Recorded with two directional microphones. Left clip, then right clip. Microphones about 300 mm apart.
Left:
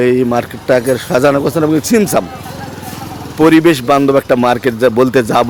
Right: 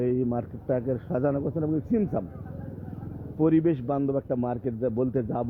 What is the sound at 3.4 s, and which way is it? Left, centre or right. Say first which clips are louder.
A man's voice: left 16 dB; centre.